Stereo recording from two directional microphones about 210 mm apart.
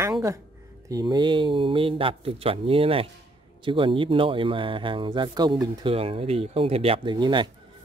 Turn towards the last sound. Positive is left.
turn(degrees=-20)  # may be behind; listen again after turning